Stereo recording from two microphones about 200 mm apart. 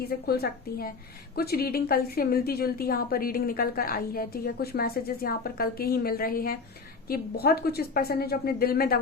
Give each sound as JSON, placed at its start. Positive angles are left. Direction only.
{"t": 0.3, "sound": "a woman's voice", "side_deg": 50}